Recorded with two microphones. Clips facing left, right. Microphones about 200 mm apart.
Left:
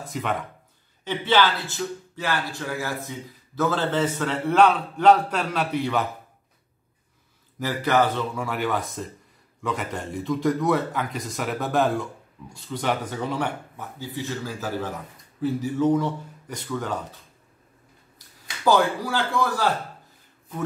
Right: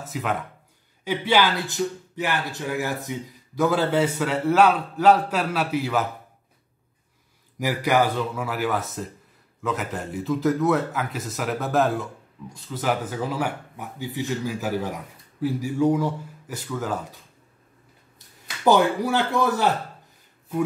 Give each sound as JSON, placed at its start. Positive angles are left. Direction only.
{"t": 0.0, "sound": "speech", "side_deg": 0}
{"t": 7.5, "sound": "speech", "side_deg": -10}
{"t": 13.7, "sound": "speech", "side_deg": -15}
{"t": 18.6, "sound": "speech", "side_deg": -20}